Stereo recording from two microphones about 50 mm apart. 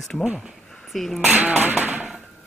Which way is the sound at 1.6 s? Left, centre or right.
Right.